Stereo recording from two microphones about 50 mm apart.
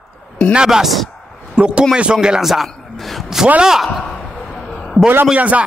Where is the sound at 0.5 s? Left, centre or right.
Centre.